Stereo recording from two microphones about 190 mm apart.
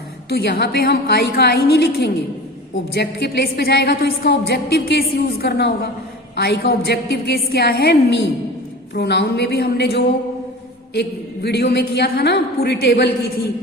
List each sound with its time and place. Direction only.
0.3 s a woman's voice: 55° left (ahead or behind)
11.4 s a woman's voice: 60° left (ahead or behind)